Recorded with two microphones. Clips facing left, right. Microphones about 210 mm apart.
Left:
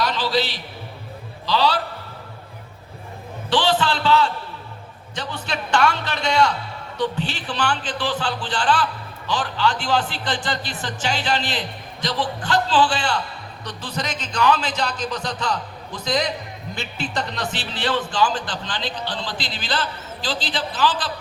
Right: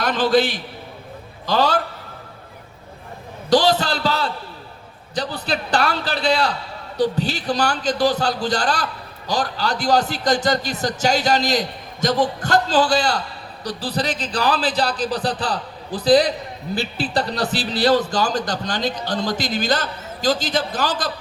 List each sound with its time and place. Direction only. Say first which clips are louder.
0.0 s a man's voice: right 5 dB; 50° right (ahead or behind)
3.5 s a man's voice: right 4 dB; 40° right (ahead or behind)